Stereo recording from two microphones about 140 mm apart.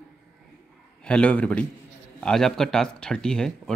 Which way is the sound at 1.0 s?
10° left (ahead or behind).